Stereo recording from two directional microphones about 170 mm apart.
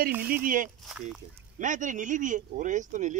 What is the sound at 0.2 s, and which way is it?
Speech, 55° right (ahead or behind).